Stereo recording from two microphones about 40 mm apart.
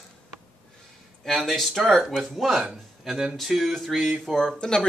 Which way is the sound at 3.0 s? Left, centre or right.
Centre.